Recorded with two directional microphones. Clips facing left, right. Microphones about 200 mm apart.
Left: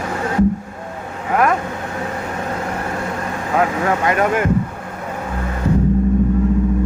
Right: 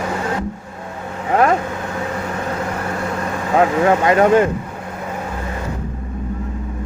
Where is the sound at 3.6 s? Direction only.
30° right (ahead or behind).